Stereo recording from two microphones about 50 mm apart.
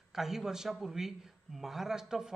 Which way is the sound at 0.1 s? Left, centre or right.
Centre.